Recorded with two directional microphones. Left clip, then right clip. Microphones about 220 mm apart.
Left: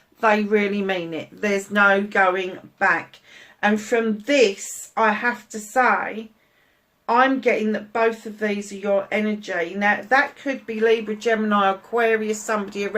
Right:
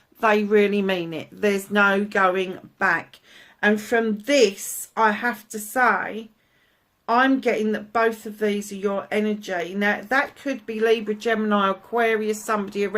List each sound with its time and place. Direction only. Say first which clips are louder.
0.2 s speech: even; 45° right (ahead or behind)